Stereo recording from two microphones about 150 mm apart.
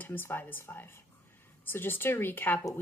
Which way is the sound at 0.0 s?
15° left (ahead or behind).